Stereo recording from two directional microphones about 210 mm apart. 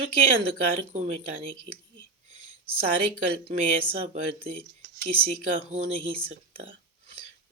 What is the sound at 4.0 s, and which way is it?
Speech, 30° right (ahead or behind).